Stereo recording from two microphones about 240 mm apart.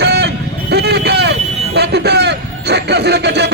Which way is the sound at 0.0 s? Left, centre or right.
Right.